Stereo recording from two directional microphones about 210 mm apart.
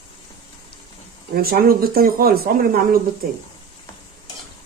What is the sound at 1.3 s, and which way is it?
Speech, 45° right (ahead or behind).